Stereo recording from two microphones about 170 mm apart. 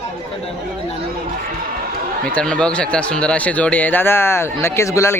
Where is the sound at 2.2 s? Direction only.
5° left (ahead or behind).